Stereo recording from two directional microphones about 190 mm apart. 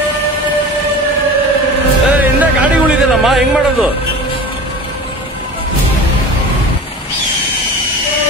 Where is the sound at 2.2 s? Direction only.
10° right (ahead or behind).